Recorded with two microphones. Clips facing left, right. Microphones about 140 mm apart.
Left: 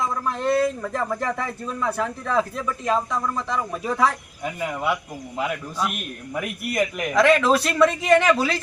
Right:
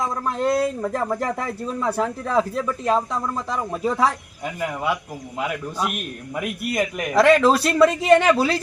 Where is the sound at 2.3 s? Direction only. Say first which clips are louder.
Right 2 dB; 5° right (ahead or behind).